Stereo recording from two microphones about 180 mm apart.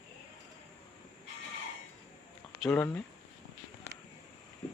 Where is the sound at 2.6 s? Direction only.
5° left (ahead or behind).